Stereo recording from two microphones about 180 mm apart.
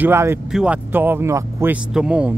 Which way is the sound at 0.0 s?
15° right (ahead or behind).